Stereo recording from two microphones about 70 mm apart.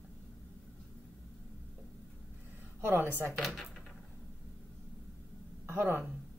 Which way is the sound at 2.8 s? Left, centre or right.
Right.